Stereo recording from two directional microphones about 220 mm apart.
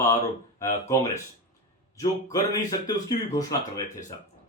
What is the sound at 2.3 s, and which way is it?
Speech, 15° left (ahead or behind).